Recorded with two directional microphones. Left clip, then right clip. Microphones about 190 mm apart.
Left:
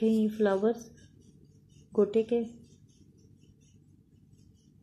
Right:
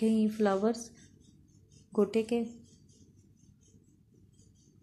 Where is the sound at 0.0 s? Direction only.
10° right (ahead or behind).